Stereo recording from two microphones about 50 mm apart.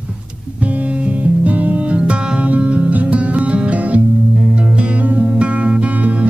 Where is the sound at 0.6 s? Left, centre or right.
Right.